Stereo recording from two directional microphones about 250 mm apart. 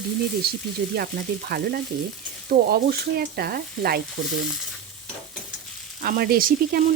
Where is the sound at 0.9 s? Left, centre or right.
Right.